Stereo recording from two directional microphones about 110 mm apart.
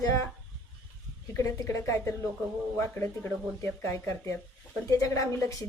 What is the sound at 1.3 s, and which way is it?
Speech, 30° left (ahead or behind).